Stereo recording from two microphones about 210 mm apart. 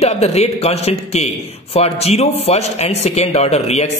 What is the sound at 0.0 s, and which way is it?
A man's voice, 30° left (ahead or behind).